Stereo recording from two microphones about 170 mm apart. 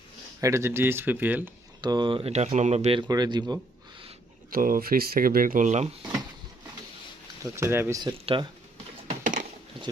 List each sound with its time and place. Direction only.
0.4 s speech: 15° right (ahead or behind)
1.8 s speech: 25° right (ahead or behind)
3.1 s speech: 25° right (ahead or behind)
4.5 s speech: 55° right (ahead or behind)
7.5 s speech: 15° right (ahead or behind)
8.0 s speech: 25° right (ahead or behind)
9.0 s a sound: 50° right (ahead or behind)